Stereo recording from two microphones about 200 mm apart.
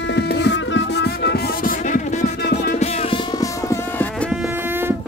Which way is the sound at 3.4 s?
15° left (ahead or behind).